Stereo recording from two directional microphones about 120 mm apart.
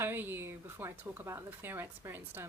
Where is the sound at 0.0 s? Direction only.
15° right (ahead or behind).